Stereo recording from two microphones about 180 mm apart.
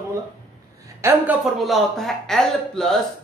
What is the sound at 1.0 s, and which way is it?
Speech, 15° right (ahead or behind).